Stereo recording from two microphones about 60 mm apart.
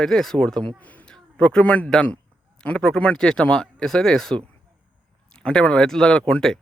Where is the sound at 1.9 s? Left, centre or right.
Centre.